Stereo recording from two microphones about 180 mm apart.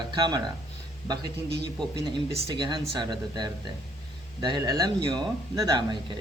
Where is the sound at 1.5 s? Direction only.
65° right (ahead or behind).